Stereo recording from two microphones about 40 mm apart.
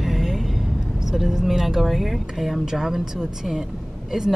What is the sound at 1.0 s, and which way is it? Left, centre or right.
Speech, centre.